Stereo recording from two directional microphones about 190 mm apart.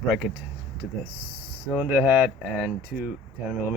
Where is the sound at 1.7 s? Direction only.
5° right (ahead or behind).